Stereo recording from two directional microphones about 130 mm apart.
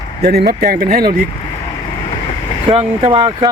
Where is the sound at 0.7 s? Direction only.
90° right.